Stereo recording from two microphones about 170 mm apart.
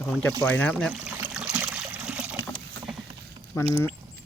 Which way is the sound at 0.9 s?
5° right (ahead or behind).